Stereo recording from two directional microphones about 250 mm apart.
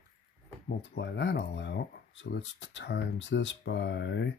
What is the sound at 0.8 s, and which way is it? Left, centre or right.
Speech, left.